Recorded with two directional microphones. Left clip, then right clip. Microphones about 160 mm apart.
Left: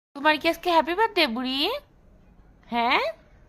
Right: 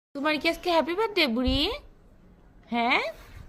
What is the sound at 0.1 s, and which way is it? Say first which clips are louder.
A woman's voice: left 4 dB; 40° left (ahead or behind).